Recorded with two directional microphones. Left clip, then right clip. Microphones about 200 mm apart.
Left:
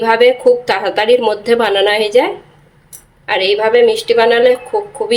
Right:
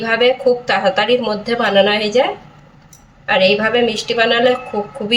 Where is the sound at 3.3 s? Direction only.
45° left (ahead or behind).